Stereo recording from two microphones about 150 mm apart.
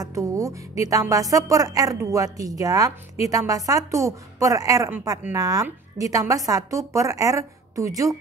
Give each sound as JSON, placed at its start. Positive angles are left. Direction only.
{"t": 0.0, "sound": "music", "side_deg": -20}